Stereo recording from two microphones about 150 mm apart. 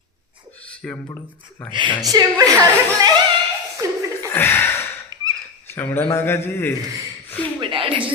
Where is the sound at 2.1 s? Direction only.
25° right (ahead or behind).